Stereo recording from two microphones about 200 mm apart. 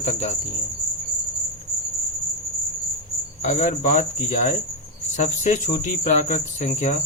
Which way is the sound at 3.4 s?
35° left (ahead or behind).